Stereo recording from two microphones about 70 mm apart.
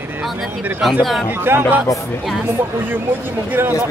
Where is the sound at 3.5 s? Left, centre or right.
Right.